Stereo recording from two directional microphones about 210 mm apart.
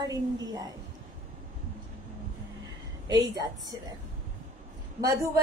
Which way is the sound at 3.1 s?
20° right (ahead or behind).